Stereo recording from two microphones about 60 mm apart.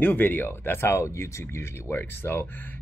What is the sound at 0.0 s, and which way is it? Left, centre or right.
Speech, left.